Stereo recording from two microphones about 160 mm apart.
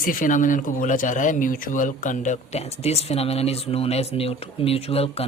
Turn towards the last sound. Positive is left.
turn(degrees=40)  # may be behind; listen again after turning